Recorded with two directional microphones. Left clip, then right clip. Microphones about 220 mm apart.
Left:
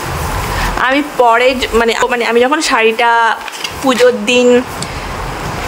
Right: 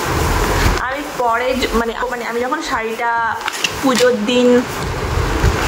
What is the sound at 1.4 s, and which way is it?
Speech, 45° left (ahead or behind).